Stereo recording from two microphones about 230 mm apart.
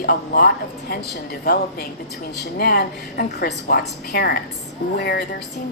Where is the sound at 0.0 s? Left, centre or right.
Left.